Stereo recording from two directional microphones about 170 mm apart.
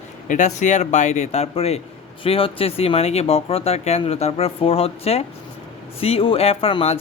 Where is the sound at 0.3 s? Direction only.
45° left (ahead or behind).